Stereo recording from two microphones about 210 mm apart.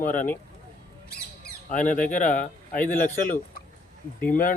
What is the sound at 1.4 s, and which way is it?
Speech, 40° left (ahead or behind).